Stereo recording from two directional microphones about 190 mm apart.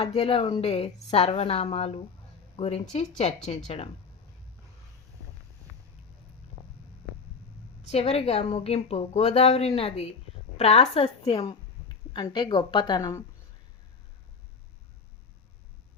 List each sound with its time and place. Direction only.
0.0 s a woman's voice: 30° left (ahead or behind)
7.9 s a woman's voice: 30° left (ahead or behind)